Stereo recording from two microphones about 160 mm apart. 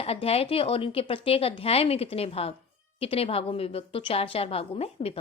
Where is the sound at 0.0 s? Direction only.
40° left (ahead or behind).